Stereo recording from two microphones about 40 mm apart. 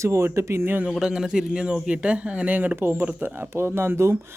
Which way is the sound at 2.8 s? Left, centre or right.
Right.